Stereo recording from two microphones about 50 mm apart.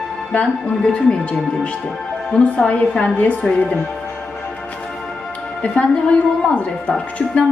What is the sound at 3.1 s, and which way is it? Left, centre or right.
Speech, left.